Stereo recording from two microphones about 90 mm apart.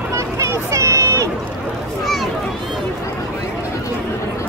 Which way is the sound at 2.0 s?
Centre (ahead or behind).